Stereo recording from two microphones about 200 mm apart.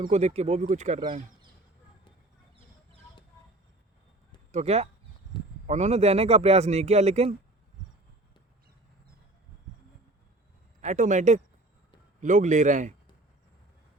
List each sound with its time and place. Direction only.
0.0 s speech: 35° right (ahead or behind)
4.5 s speech: 30° right (ahead or behind)
10.8 s speech: 40° right (ahead or behind)